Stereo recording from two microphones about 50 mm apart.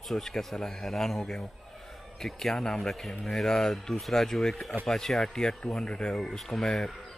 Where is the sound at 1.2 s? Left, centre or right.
Centre.